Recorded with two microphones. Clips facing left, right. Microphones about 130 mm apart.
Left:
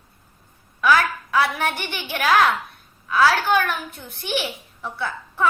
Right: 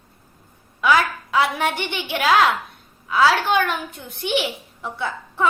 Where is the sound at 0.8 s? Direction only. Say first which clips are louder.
Even; 20° right (ahead or behind).